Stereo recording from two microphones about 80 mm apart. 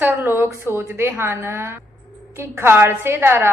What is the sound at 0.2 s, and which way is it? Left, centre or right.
A woman's voice, right.